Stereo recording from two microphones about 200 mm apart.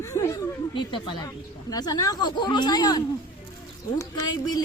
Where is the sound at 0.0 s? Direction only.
15° left (ahead or behind).